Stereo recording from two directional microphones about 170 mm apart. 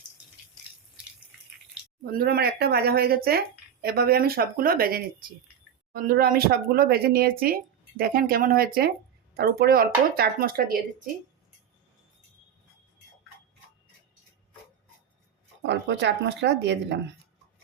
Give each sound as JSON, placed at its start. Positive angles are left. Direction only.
{"t": 2.0, "sound": "speech", "side_deg": -65}
{"t": 15.6, "sound": "speech", "side_deg": -90}